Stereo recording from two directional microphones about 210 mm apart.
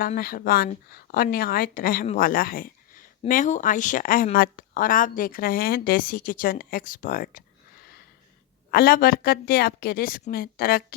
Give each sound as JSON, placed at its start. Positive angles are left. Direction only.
{"t": 0.1, "sound": "a woman's voice", "side_deg": 45}